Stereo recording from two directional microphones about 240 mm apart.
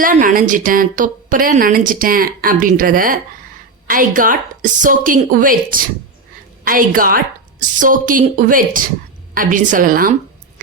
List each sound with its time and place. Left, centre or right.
0.0 s a woman's voice: right